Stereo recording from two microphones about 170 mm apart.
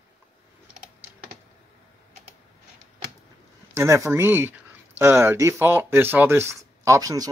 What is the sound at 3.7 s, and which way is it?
Speech, 15° right (ahead or behind).